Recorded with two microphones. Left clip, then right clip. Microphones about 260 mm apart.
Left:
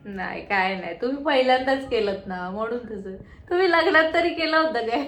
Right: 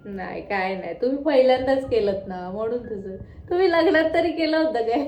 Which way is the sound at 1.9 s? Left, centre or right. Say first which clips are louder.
Right 2 dB; centre.